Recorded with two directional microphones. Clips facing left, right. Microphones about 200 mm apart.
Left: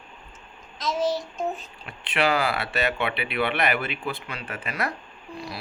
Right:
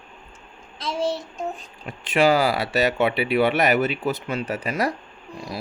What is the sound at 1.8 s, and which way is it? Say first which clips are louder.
Speech: right 6 dB; 45° right (ahead or behind).